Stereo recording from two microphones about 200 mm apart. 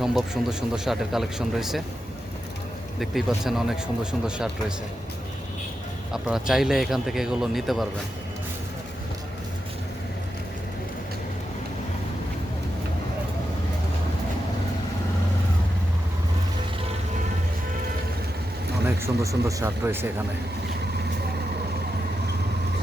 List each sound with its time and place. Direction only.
0.0 s speech: centre (ahead or behind)
3.0 s speech: centre (ahead or behind)
6.2 s speech: centre (ahead or behind)
18.9 s speech: 15° right (ahead or behind)